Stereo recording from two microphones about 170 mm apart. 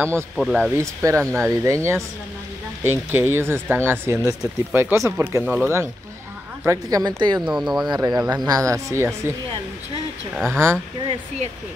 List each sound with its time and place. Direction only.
0.4 s speech: centre (ahead or behind)
0.7 s a woman's voice: 15° right (ahead or behind)
7.4 s speech: centre (ahead or behind)
7.9 s a woman's voice: 20° right (ahead or behind)
10.3 s speech: centre (ahead or behind)